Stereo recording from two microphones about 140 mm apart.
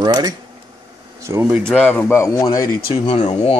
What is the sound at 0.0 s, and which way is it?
Speech, 30° right (ahead or behind).